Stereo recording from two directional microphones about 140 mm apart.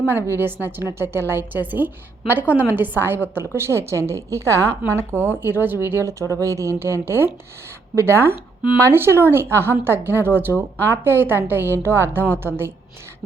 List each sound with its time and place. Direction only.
0.0 s a woman's voice: 15° right (ahead or behind)